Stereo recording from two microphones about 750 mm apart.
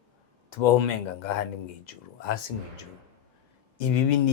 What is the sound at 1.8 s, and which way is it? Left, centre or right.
Speech, left.